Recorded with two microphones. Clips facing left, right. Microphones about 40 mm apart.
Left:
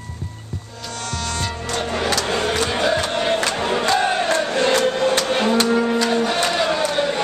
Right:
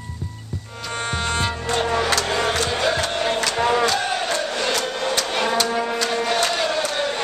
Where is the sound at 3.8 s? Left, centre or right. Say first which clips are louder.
Left 3 dB; centre.